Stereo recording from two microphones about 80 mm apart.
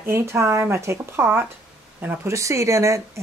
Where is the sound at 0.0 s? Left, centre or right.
Right.